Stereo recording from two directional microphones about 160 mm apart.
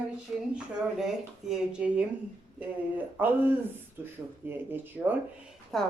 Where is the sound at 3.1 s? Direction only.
10° right (ahead or behind).